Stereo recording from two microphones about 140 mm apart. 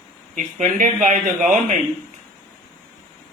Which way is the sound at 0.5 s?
60° right (ahead or behind).